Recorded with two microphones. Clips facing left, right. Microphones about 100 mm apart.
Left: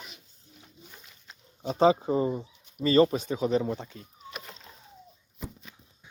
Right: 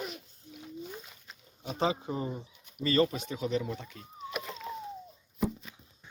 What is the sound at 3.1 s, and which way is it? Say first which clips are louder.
Speech: left 6 dB; 40° left (ahead or behind).